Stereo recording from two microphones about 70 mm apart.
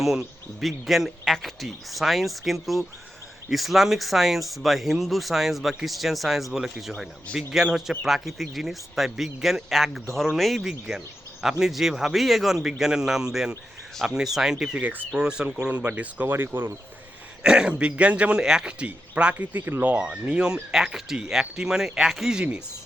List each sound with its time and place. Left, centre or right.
0.0 s speech: centre; by 16.7 s right
17.4 s speech: centre
20.1 s speech: centre